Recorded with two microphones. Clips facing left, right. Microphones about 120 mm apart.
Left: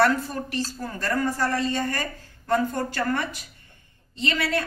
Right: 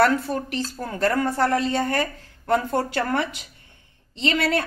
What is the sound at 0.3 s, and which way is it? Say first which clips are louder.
A woman's voice: right 3 dB; 65° right (ahead or behind).